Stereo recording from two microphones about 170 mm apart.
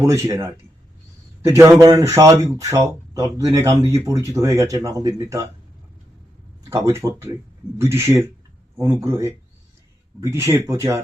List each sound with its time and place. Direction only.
0.0 s speech: 15° right (ahead or behind)
6.7 s speech: 15° right (ahead or behind)